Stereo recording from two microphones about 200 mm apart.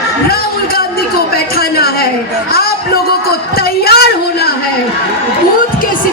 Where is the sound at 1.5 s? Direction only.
50° left (ahead or behind).